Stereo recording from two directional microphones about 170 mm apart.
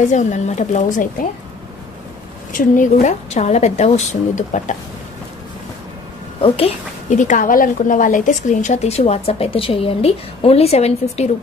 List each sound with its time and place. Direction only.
0.1 s a woman's voice: 45° left (ahead or behind)
2.5 s a woman's voice: 50° left (ahead or behind)
6.4 s a woman's voice: 35° left (ahead or behind)